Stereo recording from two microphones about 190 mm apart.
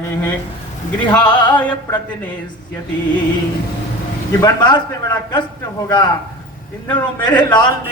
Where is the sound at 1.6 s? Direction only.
10° left (ahead or behind).